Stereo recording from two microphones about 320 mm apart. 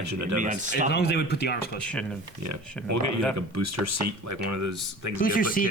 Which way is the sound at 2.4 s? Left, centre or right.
Right.